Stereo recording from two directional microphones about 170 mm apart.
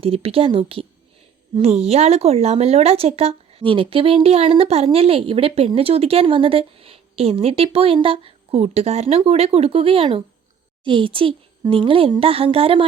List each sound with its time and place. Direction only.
0.0 s speech: 35° right (ahead or behind)